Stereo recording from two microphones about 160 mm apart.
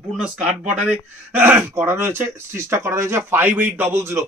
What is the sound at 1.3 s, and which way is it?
Speech, 10° right (ahead or behind).